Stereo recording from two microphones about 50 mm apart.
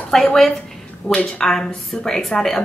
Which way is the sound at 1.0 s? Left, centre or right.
Left.